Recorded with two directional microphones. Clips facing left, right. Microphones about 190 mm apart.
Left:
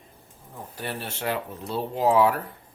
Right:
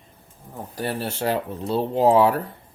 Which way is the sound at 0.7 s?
35° right (ahead or behind).